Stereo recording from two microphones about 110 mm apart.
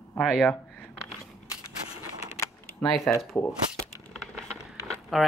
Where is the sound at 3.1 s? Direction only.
20° left (ahead or behind).